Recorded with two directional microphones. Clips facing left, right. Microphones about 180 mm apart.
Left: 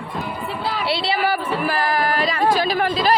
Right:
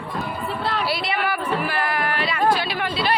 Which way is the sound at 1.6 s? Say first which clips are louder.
Left 4 dB; 35° left (ahead or behind).